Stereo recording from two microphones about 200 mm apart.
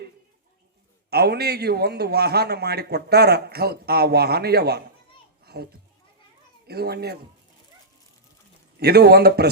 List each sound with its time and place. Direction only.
1.1 s a man's voice: 55° right (ahead or behind)
5.5 s children playing: 55° right (ahead or behind)
6.7 s a man's voice: 55° right (ahead or behind)
8.8 s a man's voice: 55° right (ahead or behind)